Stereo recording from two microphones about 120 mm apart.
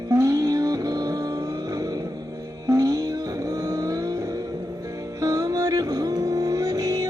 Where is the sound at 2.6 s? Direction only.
30° right (ahead or behind).